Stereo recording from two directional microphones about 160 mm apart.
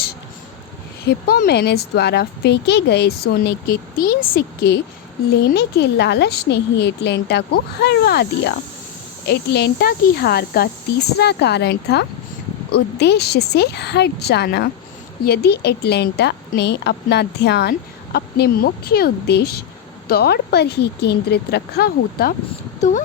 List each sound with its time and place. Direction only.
1.0 s a woman's voice: 85° left
5.5 s a woman's voice: 90° left; by 10.7 s 75° left (ahead or behind)
11.2 s a woman's voice: 90° left
15.2 s a woman's voice: 75° left (ahead or behind)
22.8 s speech: 50° left (ahead or behind)